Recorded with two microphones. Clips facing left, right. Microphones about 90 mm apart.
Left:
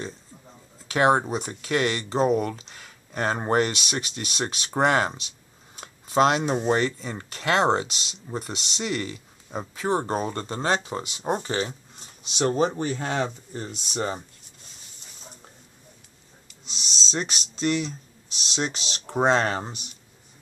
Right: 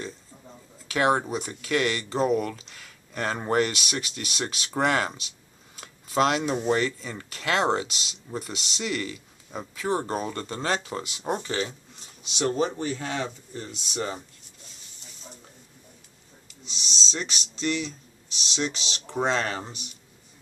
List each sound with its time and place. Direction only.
0.8 s speech: 30° left (ahead or behind)
16.6 s speech: 50° left (ahead or behind)